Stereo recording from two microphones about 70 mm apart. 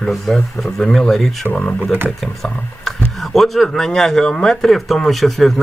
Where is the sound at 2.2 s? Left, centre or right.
Centre.